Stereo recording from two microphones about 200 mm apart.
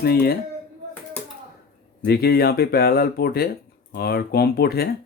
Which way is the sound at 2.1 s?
50° left (ahead or behind).